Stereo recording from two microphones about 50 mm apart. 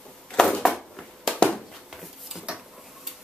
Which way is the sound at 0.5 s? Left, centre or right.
Centre.